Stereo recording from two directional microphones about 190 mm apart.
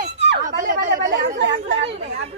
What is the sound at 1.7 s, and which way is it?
Speech, 65° right (ahead or behind).